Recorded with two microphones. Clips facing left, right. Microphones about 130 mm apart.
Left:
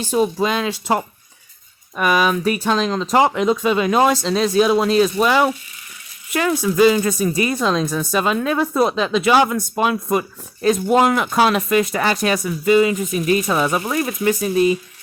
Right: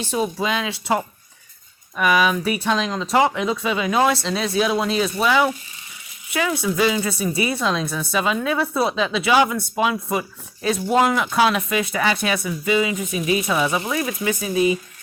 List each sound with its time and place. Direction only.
0.0 s speech: 45° left (ahead or behind)
2.0 s speech: 45° left (ahead or behind)